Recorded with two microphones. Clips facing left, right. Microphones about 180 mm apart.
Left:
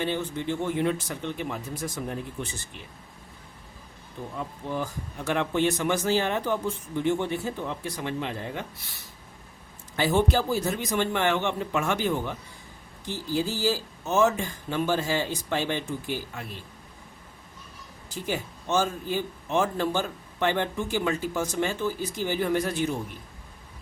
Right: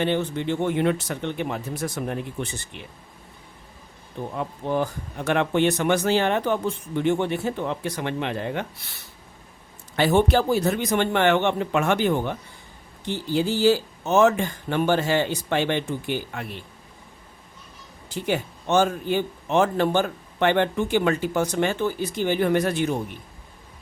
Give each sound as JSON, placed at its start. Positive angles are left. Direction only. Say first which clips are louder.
{"t": 0.0, "sound": "a man's voice", "louder": "right 5 dB", "side_deg": -70}
{"t": 4.4, "sound": "a man's voice", "louder": "right 6 dB", "side_deg": -65}
{"t": 18.1, "sound": "a man's voice", "louder": "right 5 dB", "side_deg": -65}